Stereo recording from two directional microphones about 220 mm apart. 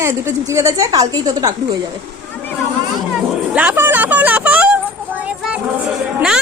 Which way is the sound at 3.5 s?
10° right (ahead or behind).